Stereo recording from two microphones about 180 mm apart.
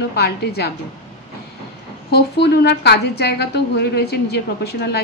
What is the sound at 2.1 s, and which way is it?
A woman's voice, 70° left (ahead or behind).